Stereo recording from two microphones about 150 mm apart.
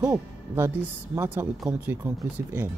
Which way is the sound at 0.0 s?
20° right (ahead or behind).